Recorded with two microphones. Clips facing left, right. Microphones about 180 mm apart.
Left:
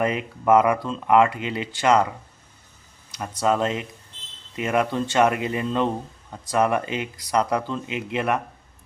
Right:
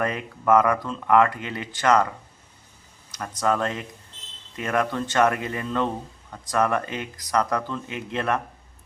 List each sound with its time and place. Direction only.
0.0 s speech: 20° left (ahead or behind)
3.4 s speech: 20° left (ahead or behind)